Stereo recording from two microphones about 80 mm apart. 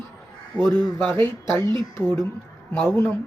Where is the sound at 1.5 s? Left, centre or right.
Right.